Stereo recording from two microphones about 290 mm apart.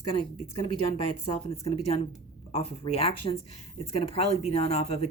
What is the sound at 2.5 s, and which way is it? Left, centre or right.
A woman's voice, centre.